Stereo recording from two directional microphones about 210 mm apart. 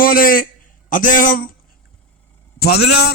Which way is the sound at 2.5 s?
50° left (ahead or behind).